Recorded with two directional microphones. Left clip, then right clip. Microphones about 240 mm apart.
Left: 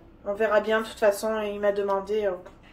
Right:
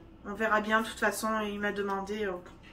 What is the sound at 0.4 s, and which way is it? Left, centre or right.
Speech, centre.